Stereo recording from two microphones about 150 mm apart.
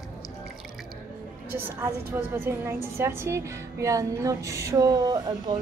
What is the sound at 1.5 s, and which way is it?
A woman's voice, 15° right (ahead or behind).